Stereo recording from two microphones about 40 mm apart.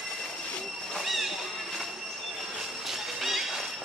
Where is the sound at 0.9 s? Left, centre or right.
Centre.